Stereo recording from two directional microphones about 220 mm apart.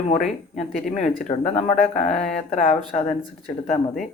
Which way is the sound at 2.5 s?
35° left (ahead or behind).